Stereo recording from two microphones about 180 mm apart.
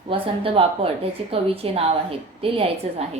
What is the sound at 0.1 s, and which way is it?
A woman's voice, 30° right (ahead or behind).